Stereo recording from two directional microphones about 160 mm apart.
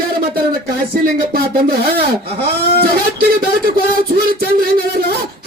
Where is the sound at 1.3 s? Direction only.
70° right (ahead or behind).